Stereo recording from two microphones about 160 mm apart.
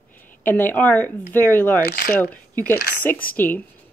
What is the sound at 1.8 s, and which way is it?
Speech, 80° left.